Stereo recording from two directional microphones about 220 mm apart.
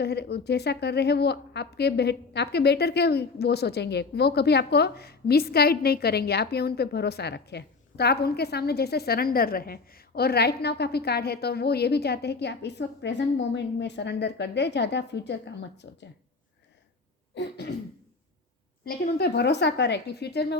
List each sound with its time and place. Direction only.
0.0 s a woman's voice: 50° left (ahead or behind)
17.3 s a woman's voice: 50° left (ahead or behind)
18.9 s a woman's voice: 45° left (ahead or behind)